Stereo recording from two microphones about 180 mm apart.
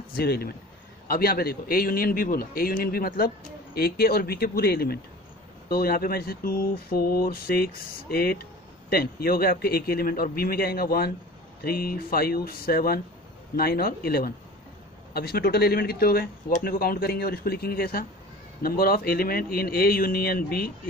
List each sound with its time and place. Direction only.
0.1 s speech: 60° left (ahead or behind)